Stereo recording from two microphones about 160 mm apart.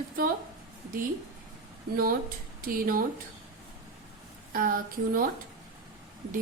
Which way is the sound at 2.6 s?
60° right (ahead or behind).